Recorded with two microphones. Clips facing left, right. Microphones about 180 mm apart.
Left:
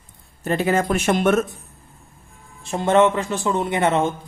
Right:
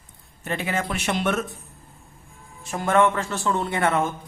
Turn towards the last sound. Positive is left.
turn(degrees=20)  # may be behind; listen again after turning